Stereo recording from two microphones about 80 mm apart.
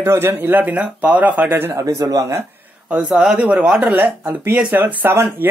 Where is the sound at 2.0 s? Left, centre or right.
Right.